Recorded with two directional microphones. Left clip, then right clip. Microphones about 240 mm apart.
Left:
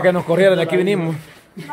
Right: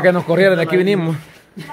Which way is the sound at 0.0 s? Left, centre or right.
Centre.